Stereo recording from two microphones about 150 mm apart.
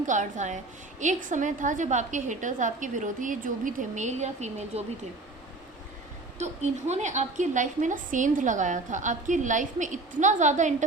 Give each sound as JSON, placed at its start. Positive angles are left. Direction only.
{"t": 0.0, "sound": "a woman's voice", "side_deg": -55}
{"t": 6.4, "sound": "a woman's voice", "side_deg": -50}